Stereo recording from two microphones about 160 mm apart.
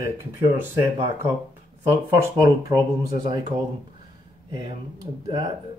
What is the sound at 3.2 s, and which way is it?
Speech, 25° right (ahead or behind).